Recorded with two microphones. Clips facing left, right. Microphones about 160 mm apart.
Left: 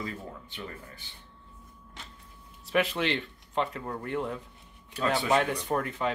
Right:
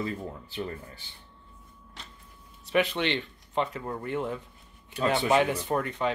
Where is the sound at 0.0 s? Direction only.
30° right (ahead or behind).